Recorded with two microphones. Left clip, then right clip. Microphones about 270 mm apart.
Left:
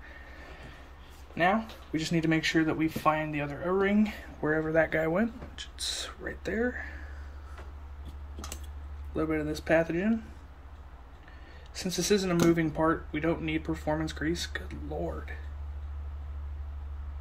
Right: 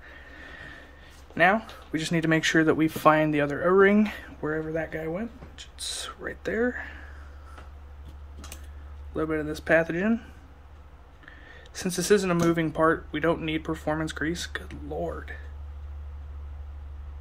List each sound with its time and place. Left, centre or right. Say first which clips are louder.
1.3 s speech: right 5 dB; centre
9.1 s speech: right 2 dB; centre
11.7 s speech: right 5 dB; centre